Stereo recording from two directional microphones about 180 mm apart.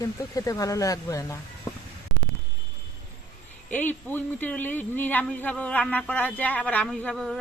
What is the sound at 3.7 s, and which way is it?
Speech, 10° left (ahead or behind).